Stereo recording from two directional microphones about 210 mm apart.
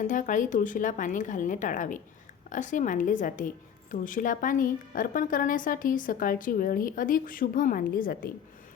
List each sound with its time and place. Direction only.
0.0 s a woman's voice: 40° left (ahead or behind)